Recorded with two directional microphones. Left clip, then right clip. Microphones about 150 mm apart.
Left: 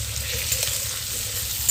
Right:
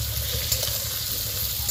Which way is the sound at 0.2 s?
Centre (ahead or behind).